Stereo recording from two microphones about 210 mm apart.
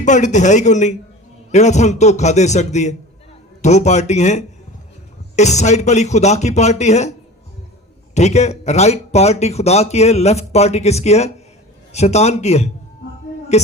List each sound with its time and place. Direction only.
0.0 s a man's voice: 35° left (ahead or behind)
8.1 s a man's voice: 30° left (ahead or behind)